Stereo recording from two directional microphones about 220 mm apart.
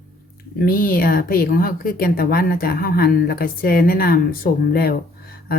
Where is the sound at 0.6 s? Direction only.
40° left (ahead or behind).